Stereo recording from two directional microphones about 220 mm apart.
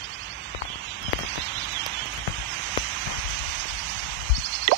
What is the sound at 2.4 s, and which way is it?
Rain on surface, 55° right (ahead or behind).